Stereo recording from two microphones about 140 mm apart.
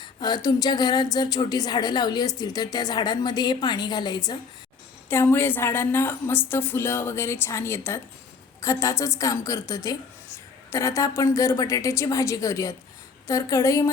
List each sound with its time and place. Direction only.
0.0 s a woman's voice: 30° left (ahead or behind)
5.0 s a woman's voice: 15° left (ahead or behind)